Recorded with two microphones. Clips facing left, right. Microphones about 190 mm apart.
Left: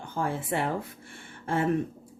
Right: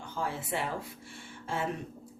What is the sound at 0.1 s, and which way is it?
Speech, 50° left (ahead or behind).